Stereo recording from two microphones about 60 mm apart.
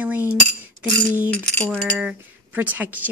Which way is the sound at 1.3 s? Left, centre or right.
Centre.